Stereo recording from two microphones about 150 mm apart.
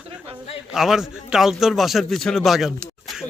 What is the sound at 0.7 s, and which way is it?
A man's voice, centre (ahead or behind).